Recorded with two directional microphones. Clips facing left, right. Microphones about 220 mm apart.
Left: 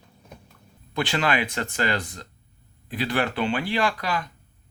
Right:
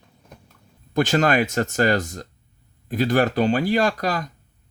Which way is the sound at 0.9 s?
45° right (ahead or behind).